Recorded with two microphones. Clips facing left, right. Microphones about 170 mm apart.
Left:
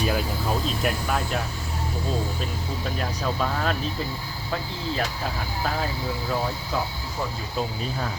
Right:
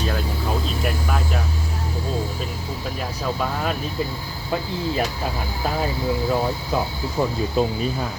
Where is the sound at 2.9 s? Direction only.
5° right (ahead or behind).